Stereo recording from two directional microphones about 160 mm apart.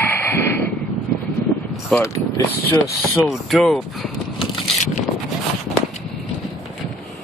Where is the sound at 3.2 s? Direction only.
Centre (ahead or behind).